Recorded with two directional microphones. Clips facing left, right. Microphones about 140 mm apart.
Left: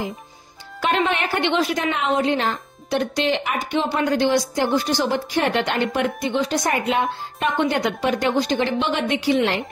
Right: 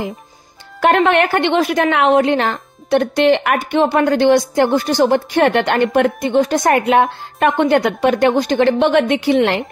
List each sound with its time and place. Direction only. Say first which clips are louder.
0.7 s a woman's voice: right 8 dB; 60° right (ahead or behind)